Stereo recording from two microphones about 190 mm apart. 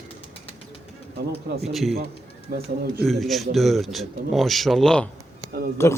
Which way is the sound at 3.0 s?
Centre (ahead or behind).